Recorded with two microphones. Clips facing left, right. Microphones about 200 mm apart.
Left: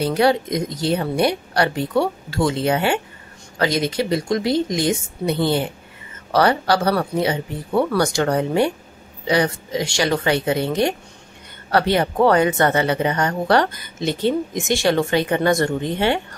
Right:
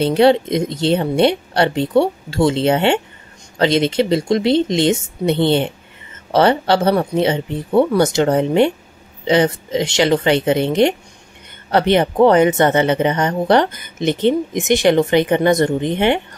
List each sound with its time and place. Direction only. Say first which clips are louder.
0.0 s speech: right 5 dB; 25° right (ahead or behind)